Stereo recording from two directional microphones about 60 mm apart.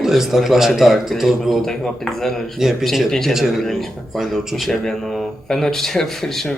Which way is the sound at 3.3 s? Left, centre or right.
Centre.